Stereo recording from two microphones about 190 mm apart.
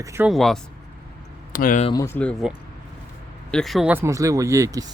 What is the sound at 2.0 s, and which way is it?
Speech, 10° left (ahead or behind).